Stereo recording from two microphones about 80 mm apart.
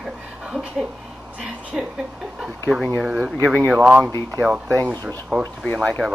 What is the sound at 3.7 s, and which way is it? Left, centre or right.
Speech, centre.